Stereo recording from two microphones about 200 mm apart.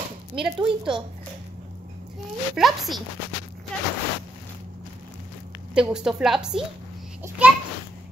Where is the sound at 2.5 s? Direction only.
Centre (ahead or behind).